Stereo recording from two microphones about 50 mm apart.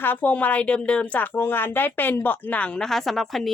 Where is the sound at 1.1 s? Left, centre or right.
Left.